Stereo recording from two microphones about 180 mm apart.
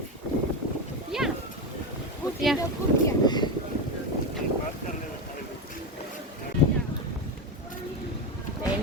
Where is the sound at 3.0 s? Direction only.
25° left (ahead or behind).